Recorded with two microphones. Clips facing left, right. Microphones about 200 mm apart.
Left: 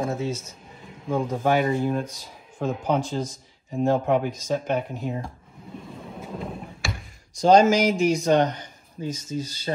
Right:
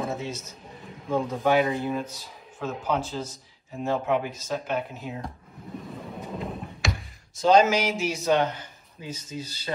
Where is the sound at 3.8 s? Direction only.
50° left (ahead or behind).